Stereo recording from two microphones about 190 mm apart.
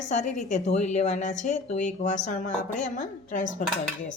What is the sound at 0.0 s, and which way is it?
A woman's voice, 40° left (ahead or behind).